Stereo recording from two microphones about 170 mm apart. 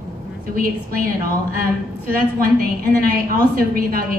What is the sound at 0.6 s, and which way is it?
A woman's voice, 55° right (ahead or behind).